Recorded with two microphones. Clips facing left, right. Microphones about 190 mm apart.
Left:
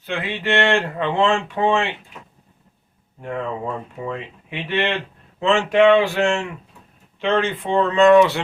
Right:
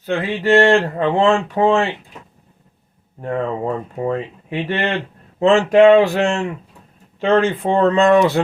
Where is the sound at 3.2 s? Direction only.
40° right (ahead or behind).